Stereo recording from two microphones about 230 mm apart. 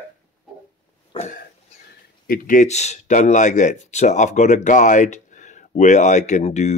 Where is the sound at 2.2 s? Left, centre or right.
Left.